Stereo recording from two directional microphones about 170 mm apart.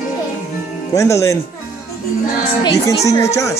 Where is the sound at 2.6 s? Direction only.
20° left (ahead or behind).